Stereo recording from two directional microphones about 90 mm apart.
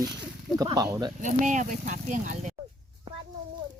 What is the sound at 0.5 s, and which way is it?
Speech, 45° right (ahead or behind).